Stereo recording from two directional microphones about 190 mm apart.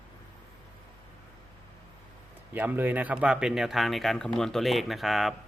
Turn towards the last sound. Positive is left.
turn(degrees=0)  # may be behind; listen again after turning